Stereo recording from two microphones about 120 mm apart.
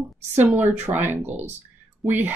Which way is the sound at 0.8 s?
15° right (ahead or behind).